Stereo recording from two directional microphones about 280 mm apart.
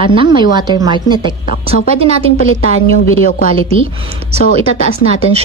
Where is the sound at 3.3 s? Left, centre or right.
Left.